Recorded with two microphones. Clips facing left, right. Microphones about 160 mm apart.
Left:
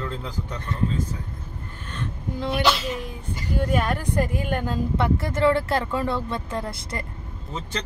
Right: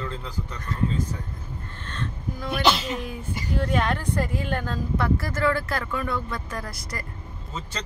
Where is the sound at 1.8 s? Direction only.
15° left (ahead or behind).